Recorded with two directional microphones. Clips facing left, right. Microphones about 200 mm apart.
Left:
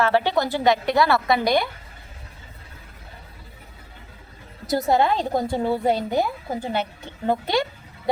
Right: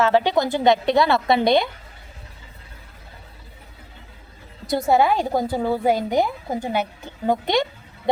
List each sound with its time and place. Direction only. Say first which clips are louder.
0.0 s a woman's voice: right 2 dB; 15° right (ahead or behind)
4.6 s a woman's voice: right 2 dB; centre (ahead or behind)
5.9 s a woman's voice: right 2 dB; 15° right (ahead or behind)